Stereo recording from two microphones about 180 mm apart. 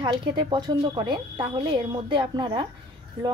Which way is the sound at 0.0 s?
25° right (ahead or behind).